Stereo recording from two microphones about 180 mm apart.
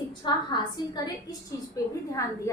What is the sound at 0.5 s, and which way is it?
A woman's voice, 20° left (ahead or behind).